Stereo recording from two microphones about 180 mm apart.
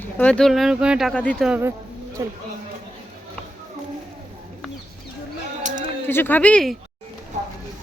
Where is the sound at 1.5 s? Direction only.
10° right (ahead or behind).